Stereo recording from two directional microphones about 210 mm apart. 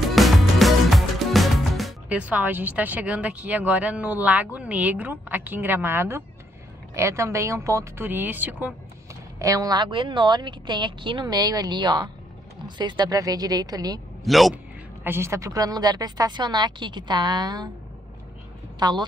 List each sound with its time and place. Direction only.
0.1 s music: centre (ahead or behind)
6.9 s a woman's voice: 15° right (ahead or behind)
14.2 s a man's voice: centre (ahead or behind)
15.0 s a woman's voice: 10° right (ahead or behind)
18.8 s speech: 20° right (ahead or behind)